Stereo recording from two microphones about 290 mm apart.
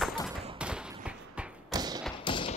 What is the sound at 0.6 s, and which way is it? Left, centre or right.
Thump, centre.